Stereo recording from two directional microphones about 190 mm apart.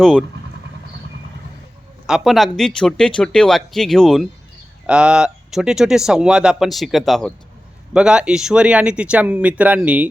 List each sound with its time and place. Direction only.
0.0 s speech: centre (ahead or behind)
2.0 s speech: centre (ahead or behind)